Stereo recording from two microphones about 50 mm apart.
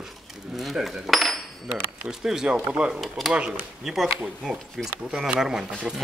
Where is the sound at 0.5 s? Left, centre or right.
Centre.